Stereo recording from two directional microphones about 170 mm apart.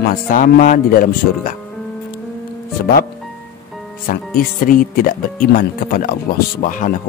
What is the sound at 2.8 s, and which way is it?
Speech, 60° left (ahead or behind).